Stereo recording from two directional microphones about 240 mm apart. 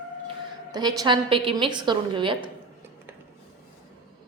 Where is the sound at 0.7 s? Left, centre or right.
Centre.